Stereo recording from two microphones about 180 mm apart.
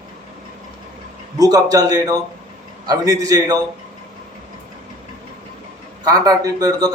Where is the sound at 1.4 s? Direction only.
20° right (ahead or behind).